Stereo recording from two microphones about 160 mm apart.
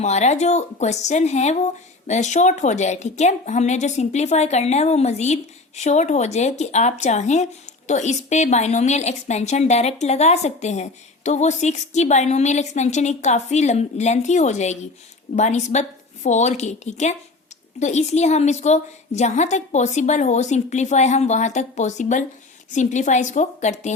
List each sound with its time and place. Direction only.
0.0 s a woman's voice: 45° left (ahead or behind)